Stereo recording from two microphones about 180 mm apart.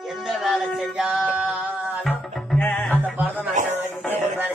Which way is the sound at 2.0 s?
5° left (ahead or behind).